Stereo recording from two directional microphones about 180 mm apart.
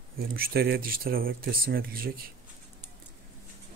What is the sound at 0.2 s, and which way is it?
Speech, 55° right (ahead or behind).